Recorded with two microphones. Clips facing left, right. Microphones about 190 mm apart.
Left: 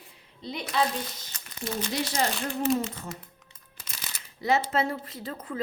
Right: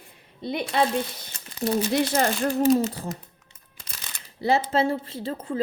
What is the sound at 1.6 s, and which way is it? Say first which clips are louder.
Speech: right 9 dB; 40° right (ahead or behind).